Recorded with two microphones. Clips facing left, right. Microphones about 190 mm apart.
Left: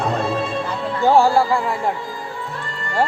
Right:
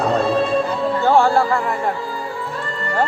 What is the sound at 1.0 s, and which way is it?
Speech, 10° left (ahead or behind).